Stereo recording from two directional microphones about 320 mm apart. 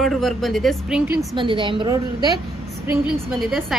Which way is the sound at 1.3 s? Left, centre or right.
Centre.